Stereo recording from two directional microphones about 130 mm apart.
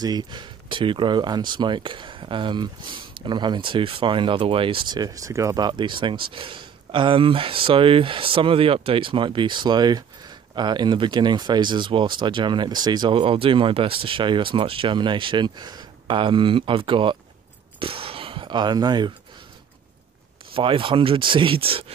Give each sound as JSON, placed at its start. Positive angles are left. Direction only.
{"t": 0.0, "sound": "speech", "side_deg": -30}
{"t": 17.7, "sound": "a sound", "side_deg": -45}
{"t": 20.5, "sound": "speech", "side_deg": -40}